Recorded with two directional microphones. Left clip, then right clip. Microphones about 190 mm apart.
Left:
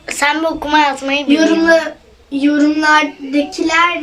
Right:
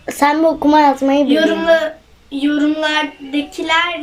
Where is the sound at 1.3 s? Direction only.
5° left (ahead or behind).